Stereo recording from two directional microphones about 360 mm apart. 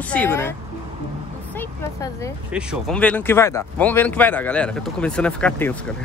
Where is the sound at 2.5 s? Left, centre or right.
Centre.